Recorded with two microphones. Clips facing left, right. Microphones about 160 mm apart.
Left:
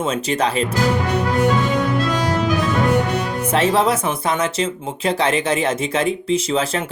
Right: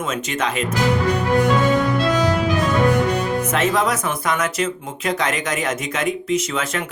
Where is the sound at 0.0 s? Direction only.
35° left (ahead or behind).